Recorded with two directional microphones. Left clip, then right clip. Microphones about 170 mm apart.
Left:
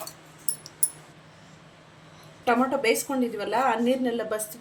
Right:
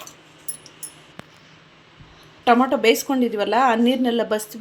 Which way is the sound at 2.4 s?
50° right (ahead or behind).